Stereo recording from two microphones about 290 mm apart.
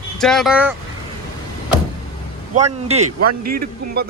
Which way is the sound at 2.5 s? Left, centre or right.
Right.